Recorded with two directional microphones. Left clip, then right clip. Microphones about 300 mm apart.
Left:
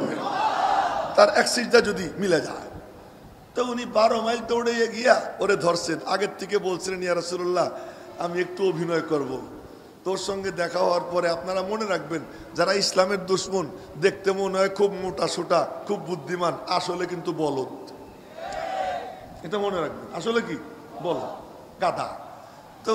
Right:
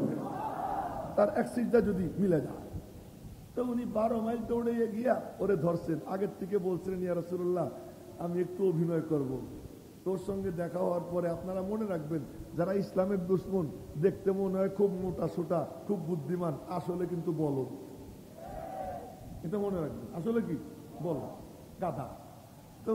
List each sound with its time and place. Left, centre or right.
0.0 s a sound: centre
3.5 s a man's voice: centre
17.4 s a man's voice: left
18.4 s battle cry: centre
19.5 s a man's voice: centre
21.0 s a man's voice: left